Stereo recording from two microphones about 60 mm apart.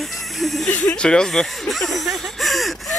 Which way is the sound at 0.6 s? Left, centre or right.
Centre.